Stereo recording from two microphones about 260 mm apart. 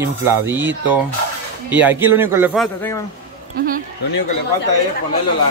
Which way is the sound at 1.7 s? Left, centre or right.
Centre.